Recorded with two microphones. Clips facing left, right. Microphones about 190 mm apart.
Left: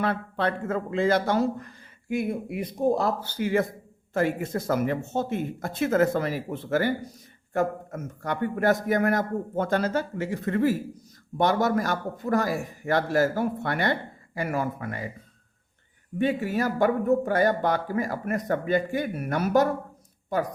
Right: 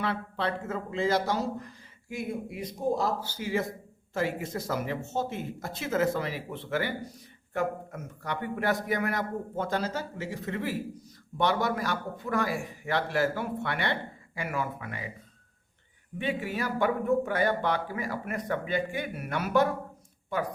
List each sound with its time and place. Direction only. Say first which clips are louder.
0.0 s a man's voice: left 4 dB; 50° left (ahead or behind)
16.1 s a man's voice: left 6 dB; 45° left (ahead or behind)